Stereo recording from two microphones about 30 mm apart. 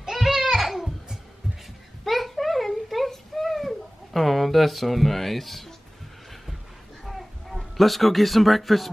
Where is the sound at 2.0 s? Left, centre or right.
Centre.